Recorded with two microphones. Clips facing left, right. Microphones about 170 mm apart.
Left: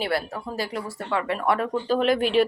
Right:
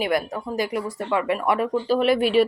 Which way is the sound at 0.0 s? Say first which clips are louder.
Right 3 dB; 15° right (ahead or behind).